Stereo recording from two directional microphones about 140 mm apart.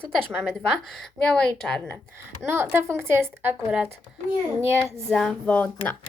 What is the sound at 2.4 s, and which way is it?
Speech, 20° right (ahead or behind).